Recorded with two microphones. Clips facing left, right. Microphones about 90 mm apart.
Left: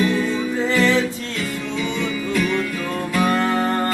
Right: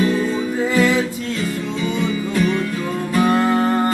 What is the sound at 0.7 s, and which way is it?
Music, 10° right (ahead or behind).